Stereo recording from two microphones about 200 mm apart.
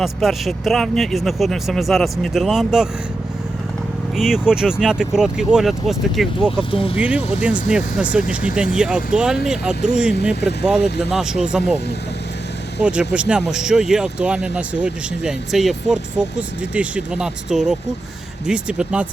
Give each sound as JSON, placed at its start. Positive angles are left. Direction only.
{"t": 0.0, "sound": "speech", "side_deg": 0}
{"t": 4.2, "sound": "speech", "side_deg": -5}
{"t": 6.7, "sound": "speech", "side_deg": 25}
{"t": 6.9, "sound": "speech", "side_deg": -5}
{"t": 12.8, "sound": "speech", "side_deg": -5}